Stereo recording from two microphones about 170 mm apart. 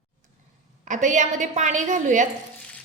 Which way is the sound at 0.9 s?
45° right (ahead or behind).